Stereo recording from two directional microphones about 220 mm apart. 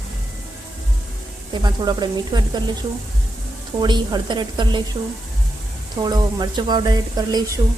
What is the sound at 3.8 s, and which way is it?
A woman's voice, 20° right (ahead or behind).